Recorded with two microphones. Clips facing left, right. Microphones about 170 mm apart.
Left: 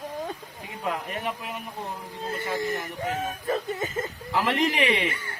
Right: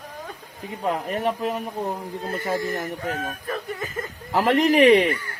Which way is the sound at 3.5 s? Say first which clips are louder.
Left 2 dB; 25° left (ahead or behind).